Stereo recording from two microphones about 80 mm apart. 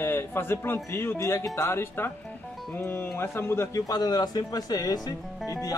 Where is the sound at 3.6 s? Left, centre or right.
Left.